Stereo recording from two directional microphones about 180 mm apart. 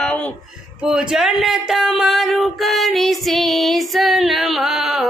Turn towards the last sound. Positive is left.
turn(degrees=0)  # may be behind; listen again after turning